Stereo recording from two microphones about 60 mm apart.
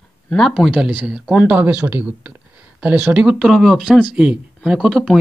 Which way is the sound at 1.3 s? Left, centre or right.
Right.